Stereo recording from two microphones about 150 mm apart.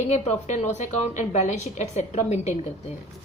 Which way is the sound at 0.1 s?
50° left (ahead or behind).